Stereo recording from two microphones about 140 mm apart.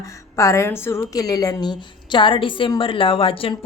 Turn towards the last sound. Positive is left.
turn(degrees=40)  # may be behind; listen again after turning